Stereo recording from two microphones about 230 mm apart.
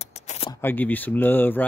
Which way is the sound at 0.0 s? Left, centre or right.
Left.